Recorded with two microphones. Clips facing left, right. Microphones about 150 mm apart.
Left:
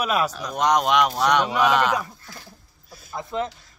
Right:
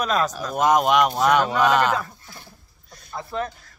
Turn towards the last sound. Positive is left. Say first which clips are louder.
# left 1 dB
turn(degrees=20)  # may be behind; listen again after turning